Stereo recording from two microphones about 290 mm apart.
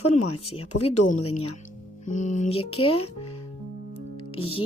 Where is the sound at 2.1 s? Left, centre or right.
Left.